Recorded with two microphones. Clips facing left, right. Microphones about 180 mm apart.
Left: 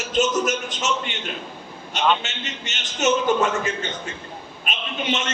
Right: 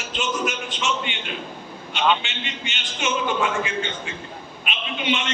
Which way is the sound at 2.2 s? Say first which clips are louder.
Even; 40° left (ahead or behind).